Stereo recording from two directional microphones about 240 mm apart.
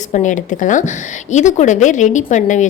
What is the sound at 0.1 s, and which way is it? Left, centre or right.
A woman's voice, left.